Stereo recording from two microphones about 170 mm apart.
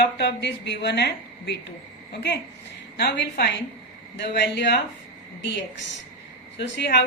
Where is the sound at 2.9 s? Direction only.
85° left.